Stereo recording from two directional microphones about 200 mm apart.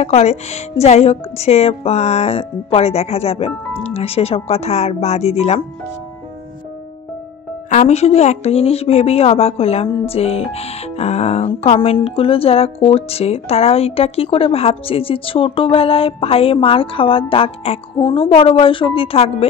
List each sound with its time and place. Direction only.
0.0 s speech: 30° left (ahead or behind)
7.7 s a woman's voice: 35° left (ahead or behind)